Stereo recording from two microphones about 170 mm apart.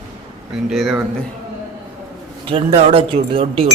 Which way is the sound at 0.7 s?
Centre (ahead or behind).